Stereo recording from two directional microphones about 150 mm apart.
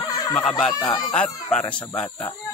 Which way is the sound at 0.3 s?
10° left (ahead or behind).